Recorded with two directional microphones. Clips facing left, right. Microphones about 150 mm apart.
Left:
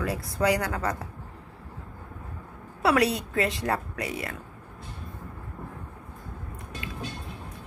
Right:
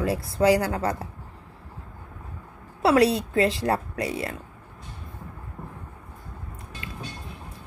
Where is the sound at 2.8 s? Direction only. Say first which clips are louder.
Right 4 dB; 30° right (ahead or behind).